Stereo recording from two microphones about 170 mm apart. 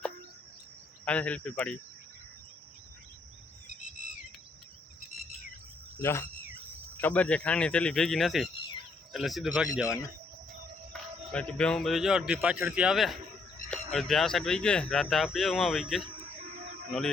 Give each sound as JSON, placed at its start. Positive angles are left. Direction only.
{"t": 1.0, "sound": "speech", "side_deg": 10}
{"t": 6.0, "sound": "speech", "side_deg": 15}
{"t": 10.9, "sound": "speech", "side_deg": 5}